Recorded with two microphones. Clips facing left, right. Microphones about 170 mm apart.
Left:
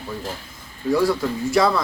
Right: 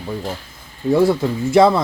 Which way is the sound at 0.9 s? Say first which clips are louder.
Right 4 dB; 25° right (ahead or behind).